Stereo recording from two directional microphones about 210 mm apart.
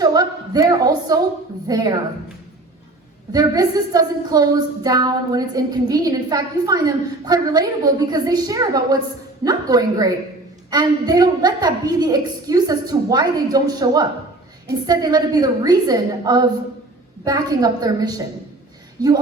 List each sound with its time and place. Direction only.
0.0 s a woman's voice: 20° right (ahead or behind)
3.3 s a woman's voice: 20° right (ahead or behind)